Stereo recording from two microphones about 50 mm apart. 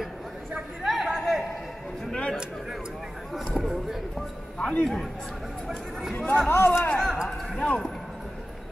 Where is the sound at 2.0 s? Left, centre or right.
Centre.